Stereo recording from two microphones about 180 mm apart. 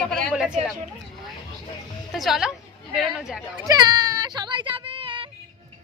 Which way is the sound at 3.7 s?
20° right (ahead or behind).